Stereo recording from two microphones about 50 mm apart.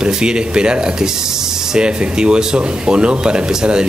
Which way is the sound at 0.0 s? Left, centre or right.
Centre.